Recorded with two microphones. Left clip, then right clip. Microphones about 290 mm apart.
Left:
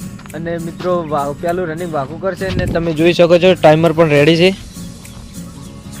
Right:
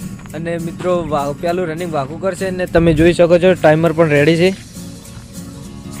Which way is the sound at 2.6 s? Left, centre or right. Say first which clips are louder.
Right 9 dB; right.